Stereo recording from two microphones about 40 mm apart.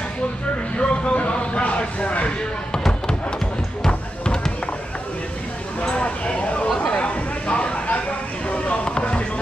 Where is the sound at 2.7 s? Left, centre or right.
Centre.